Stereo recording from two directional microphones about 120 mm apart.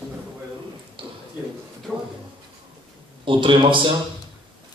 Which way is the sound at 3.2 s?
45° right (ahead or behind).